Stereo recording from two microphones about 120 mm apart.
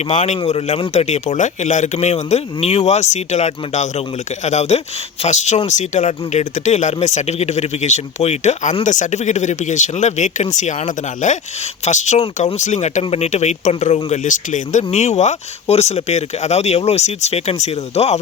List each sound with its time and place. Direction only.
0.1 s speech: 75° left (ahead or behind)
0.4 s speech: 60° left (ahead or behind)
5.6 s speech: 85° left; by 8.7 s 70° left (ahead or behind)
8.8 s speech: 90° left; by 18.2 s 65° left (ahead or behind)